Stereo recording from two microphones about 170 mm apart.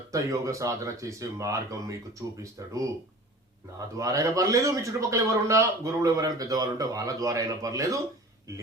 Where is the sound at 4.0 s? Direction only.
20° right (ahead or behind).